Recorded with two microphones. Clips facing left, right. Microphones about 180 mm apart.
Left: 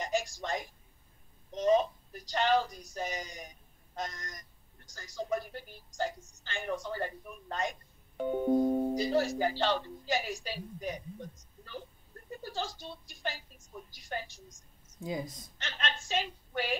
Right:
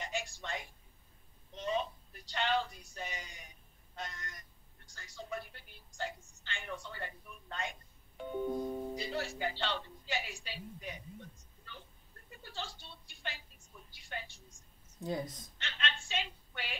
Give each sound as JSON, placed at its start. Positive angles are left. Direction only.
{"t": 0.0, "sound": "a sound", "side_deg": 40}
{"t": 1.5, "sound": "a woman's voice", "side_deg": 40}
{"t": 15.0, "sound": "a woman's voice", "side_deg": 10}
{"t": 15.6, "sound": "a woman's voice", "side_deg": 40}